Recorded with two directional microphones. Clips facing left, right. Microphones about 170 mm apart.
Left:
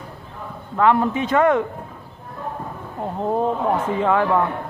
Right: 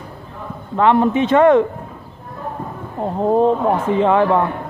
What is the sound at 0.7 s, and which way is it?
Speech, 25° right (ahead or behind).